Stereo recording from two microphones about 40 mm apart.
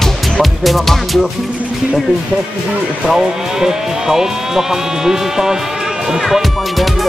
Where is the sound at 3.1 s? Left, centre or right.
Centre.